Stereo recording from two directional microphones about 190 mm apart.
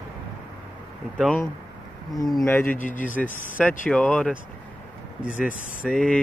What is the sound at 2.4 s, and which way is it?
Speech, 10° left (ahead or behind).